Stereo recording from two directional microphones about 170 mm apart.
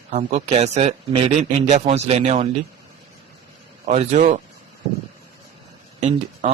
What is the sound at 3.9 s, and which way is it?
Speech, 40° right (ahead or behind).